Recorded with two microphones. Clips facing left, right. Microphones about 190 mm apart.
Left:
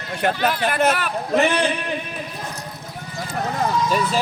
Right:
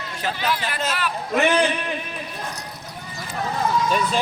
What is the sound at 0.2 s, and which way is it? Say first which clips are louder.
Speech: left 5 dB; 60° left (ahead or behind).